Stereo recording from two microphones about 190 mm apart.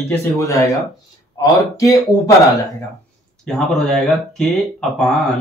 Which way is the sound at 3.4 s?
Centre (ahead or behind).